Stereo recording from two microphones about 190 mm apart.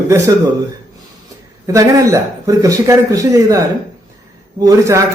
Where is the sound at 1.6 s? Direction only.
15° right (ahead or behind).